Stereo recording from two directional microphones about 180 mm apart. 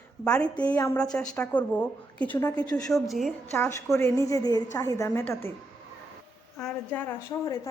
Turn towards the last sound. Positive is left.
turn(degrees=10)  # may be behind; listen again after turning